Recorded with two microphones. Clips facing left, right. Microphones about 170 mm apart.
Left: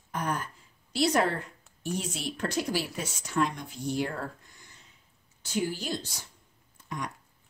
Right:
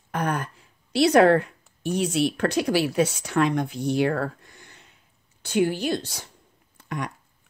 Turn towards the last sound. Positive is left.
turn(degrees=-70)  # may be behind; listen again after turning